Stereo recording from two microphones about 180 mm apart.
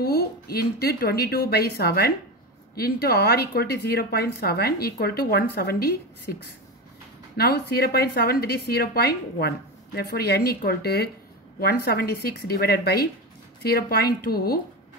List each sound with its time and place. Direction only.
0.0 s speech: 60° left (ahead or behind)
7.3 s speech: 60° left (ahead or behind)